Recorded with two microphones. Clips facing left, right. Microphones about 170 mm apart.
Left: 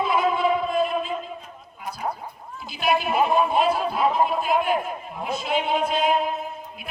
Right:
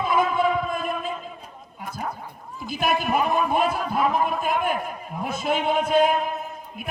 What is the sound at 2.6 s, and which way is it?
A man's voice, 50° right (ahead or behind).